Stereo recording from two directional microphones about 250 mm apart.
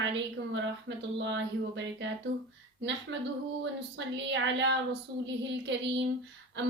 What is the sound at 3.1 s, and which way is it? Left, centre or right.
Speech, right.